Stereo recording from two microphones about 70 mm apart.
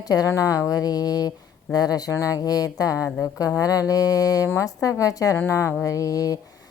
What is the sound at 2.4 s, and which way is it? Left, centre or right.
Speech, left.